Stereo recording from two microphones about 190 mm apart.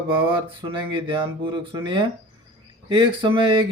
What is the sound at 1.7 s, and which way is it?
Speech, 25° right (ahead or behind).